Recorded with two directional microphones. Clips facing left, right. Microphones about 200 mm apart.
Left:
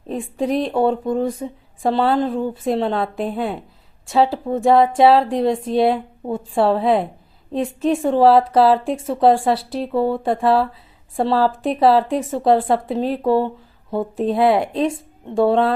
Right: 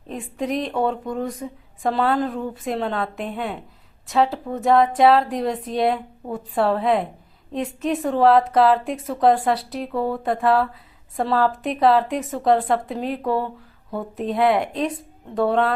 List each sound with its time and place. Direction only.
0.1 s a woman's voice: 30° left (ahead or behind)